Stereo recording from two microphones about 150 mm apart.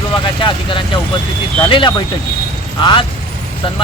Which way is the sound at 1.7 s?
30° left (ahead or behind).